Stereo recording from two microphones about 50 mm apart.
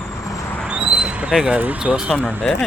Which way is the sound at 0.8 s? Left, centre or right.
Centre.